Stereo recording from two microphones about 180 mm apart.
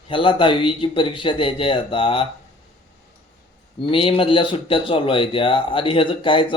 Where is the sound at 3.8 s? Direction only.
30° left (ahead or behind).